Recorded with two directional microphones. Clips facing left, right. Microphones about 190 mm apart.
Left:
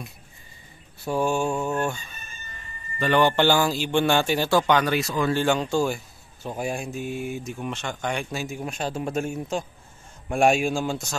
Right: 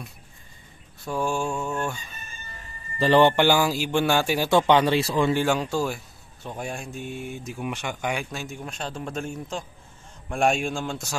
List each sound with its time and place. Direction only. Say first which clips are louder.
1.2 s speech: left 2 dB; 5° left (ahead or behind)
3.0 s speech: right 3 dB; 30° right (ahead or behind)
3.3 s speech: even; 10° right (ahead or behind)
4.5 s speech: right 4 dB; 25° right (ahead or behind)
5.3 s speech: left 1 dB; 5° right (ahead or behind)
7.5 s speech: even; 10° right (ahead or behind)
8.3 s a man's voice: left 4 dB; 5° left (ahead or behind)